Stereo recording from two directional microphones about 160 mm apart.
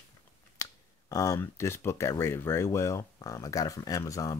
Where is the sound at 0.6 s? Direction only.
20° left (ahead or behind).